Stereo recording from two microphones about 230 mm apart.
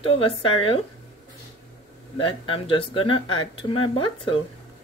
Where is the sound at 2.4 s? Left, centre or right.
Left.